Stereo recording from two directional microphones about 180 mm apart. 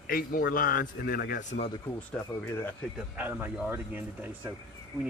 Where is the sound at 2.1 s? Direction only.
5° left (ahead or behind).